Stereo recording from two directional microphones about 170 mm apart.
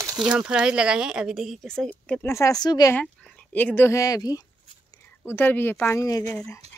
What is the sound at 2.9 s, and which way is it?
Speech, 5° left (ahead or behind).